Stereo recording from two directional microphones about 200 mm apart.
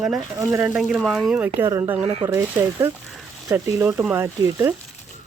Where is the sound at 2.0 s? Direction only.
30° right (ahead or behind).